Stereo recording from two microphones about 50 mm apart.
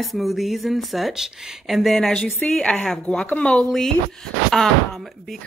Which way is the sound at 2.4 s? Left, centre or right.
Left.